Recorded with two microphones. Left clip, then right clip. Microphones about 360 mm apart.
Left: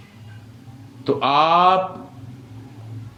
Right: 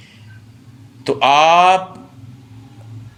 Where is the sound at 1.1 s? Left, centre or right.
Centre.